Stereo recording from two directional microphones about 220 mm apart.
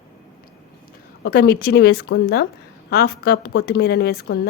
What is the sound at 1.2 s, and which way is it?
Speech, 50° left (ahead or behind).